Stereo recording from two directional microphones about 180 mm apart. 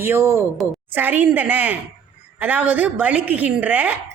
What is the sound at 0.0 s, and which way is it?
A woman's voice, 15° right (ahead or behind).